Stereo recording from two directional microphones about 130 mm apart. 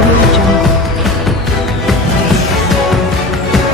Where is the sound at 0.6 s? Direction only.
Centre (ahead or behind).